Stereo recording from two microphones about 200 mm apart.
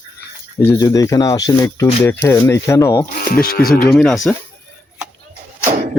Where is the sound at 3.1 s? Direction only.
45° left (ahead or behind).